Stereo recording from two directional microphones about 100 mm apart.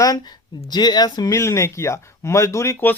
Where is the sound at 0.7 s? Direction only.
45° left (ahead or behind).